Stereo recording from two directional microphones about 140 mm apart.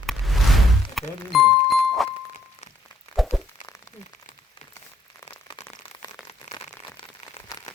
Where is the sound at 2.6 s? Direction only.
50° left (ahead or behind).